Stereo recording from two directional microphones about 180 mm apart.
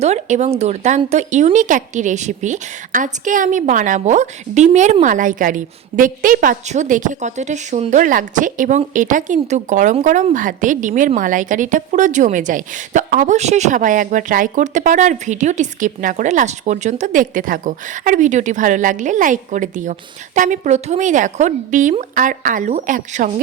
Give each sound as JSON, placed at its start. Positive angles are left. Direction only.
{"t": 0.0, "sound": "speech", "side_deg": -40}